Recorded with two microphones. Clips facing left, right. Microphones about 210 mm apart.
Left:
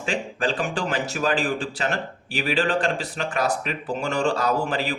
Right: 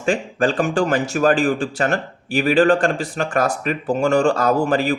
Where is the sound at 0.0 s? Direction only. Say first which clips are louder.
Right 7 dB; 50° right (ahead or behind).